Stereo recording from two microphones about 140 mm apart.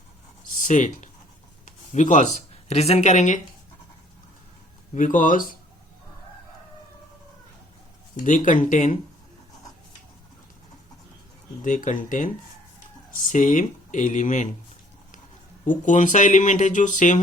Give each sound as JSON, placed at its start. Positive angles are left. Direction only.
{"t": 0.6, "sound": "speech", "side_deg": 60}
{"t": 4.9, "sound": "speech", "side_deg": 70}
{"t": 8.2, "sound": "speech", "side_deg": 65}
{"t": 11.6, "sound": "speech", "side_deg": 65}
{"t": 15.6, "sound": "speech", "side_deg": 65}